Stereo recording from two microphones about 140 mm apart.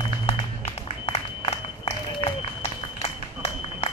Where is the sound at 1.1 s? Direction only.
45° left (ahead or behind).